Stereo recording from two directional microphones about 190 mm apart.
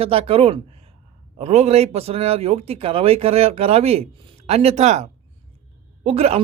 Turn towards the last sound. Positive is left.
turn(degrees=-30)  # may be behind; listen again after turning